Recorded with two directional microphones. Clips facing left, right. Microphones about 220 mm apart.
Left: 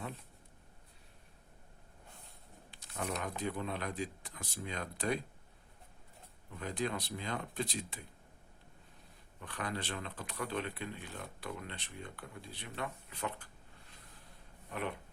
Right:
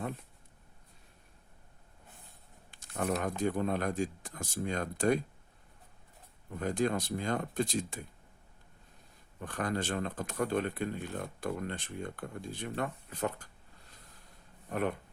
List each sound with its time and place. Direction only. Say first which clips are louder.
2.6 s a sound: right 6 dB; 50° right (ahead or behind)
3.2 s speech: right 7 dB; 50° right (ahead or behind)
6.6 s speech: right 7 dB; 45° right (ahead or behind)
9.4 s speech: right 6 dB; 45° right (ahead or behind)
14.7 s speech: right 7 dB; 45° right (ahead or behind)